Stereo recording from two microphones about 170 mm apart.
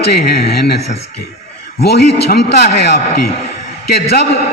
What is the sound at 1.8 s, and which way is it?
A man's voice, 75° left (ahead or behind).